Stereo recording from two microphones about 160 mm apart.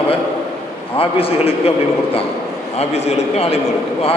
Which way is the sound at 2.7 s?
45° left (ahead or behind).